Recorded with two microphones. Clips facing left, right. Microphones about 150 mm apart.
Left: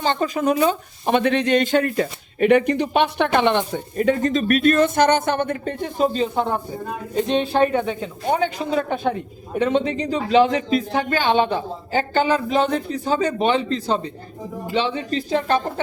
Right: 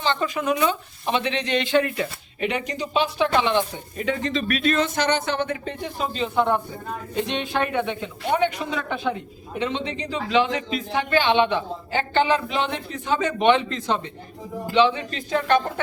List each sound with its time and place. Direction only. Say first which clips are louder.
0.0 s a man's voice: left 4 dB; 40° left (ahead or behind)
1.0 s a man's voice: left 6 dB; 50° left (ahead or behind); by 15.6 s 35° left (ahead or behind)